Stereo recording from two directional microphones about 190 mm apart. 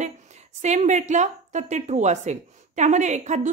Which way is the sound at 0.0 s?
35° right (ahead or behind).